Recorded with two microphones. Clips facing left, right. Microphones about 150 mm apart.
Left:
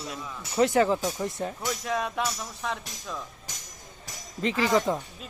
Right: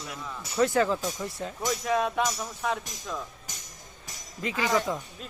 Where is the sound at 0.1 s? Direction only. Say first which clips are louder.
Left 1 dB; 20° left (ahead or behind).